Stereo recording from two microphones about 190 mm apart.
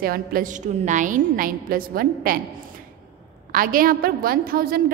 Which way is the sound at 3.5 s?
50° right (ahead or behind).